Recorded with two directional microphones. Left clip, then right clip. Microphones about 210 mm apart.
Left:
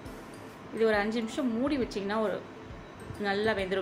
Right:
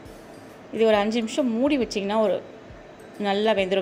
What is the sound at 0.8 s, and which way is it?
Speech, 30° right (ahead or behind).